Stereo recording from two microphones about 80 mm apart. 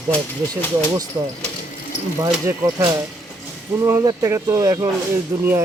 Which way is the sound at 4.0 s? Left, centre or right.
Right.